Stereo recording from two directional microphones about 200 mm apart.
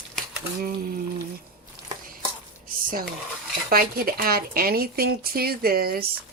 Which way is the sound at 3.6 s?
45° right (ahead or behind).